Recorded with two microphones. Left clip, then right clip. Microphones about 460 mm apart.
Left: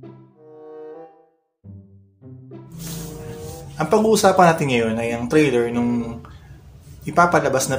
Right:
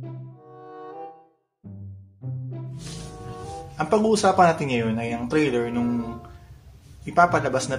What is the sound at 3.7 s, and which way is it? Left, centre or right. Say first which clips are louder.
Speech: left 4 dB; right.